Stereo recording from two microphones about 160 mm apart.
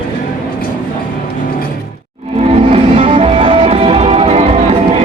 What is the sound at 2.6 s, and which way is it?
Music, 35° right (ahead or behind).